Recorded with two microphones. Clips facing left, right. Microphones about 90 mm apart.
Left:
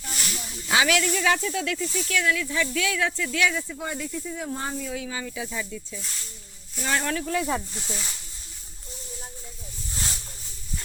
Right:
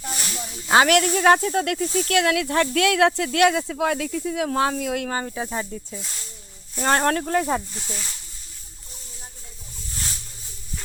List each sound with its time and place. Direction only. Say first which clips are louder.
0.7 s speech: right 6 dB; 50° right (ahead or behind)
2.1 s speech: right 5 dB; 65° right (ahead or behind)
5.1 s speech: right 5 dB; 40° right (ahead or behind)
7.7 s speech: even; 5° right (ahead or behind)